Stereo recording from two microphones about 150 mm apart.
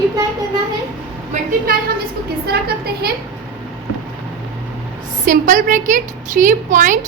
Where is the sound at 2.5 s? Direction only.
90° right.